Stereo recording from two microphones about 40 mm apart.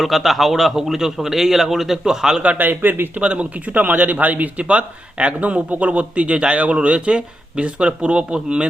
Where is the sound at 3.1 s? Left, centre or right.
Right.